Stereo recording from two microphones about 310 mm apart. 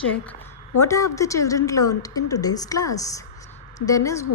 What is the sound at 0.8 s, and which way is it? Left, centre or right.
A woman's voice, centre.